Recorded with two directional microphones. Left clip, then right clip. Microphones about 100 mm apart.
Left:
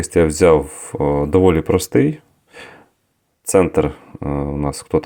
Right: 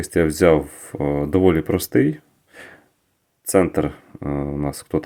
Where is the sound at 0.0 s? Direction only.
15° left (ahead or behind).